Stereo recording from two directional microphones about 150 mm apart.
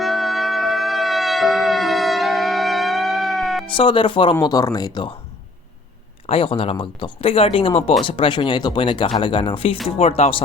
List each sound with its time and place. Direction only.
0.0 s music: centre (ahead or behind)
3.7 s speech: 35° left (ahead or behind)
6.2 s speech: 35° left (ahead or behind)